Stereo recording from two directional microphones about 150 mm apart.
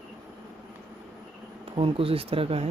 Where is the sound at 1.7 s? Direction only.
40° right (ahead or behind).